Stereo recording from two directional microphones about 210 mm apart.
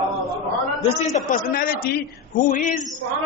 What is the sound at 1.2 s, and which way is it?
A man's voice, 40° left (ahead or behind).